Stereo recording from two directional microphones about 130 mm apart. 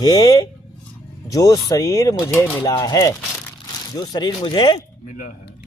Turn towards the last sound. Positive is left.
turn(degrees=35)  # may be behind; listen again after turning